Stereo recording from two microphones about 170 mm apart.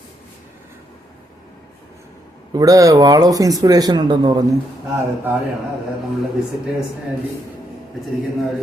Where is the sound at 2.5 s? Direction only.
20° right (ahead or behind).